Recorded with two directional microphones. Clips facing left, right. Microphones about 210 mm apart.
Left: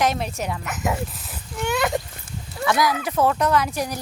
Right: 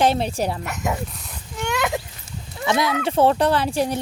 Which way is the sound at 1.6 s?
Centre (ahead or behind).